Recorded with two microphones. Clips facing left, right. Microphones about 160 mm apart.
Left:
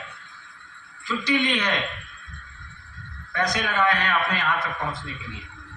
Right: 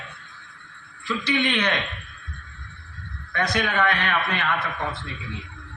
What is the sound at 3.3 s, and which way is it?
Speech, 60° right (ahead or behind).